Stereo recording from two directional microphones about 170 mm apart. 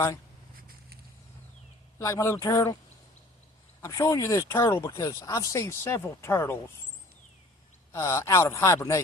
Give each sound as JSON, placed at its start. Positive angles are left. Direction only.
{"t": 2.0, "sound": "speech", "side_deg": 20}
{"t": 3.8, "sound": "speech", "side_deg": 15}
{"t": 7.9, "sound": "speech", "side_deg": 15}